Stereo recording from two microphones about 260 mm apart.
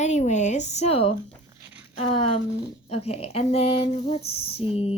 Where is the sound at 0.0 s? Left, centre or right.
Left.